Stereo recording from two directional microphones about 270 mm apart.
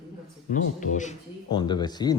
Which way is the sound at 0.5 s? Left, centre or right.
Left.